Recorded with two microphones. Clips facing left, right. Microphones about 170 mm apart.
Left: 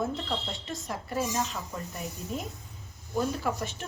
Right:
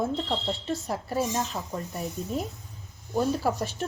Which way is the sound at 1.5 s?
40° right (ahead or behind).